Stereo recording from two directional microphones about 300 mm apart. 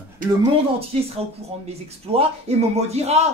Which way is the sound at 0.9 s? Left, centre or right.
Centre.